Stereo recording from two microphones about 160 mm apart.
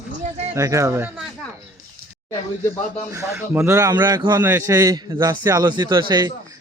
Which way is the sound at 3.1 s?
15° right (ahead or behind).